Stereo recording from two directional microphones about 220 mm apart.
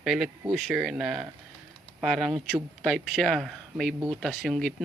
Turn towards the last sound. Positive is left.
turn(degrees=0)  # may be behind; listen again after turning